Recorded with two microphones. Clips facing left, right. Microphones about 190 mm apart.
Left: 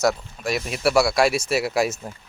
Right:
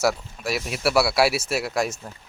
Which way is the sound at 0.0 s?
5° right (ahead or behind).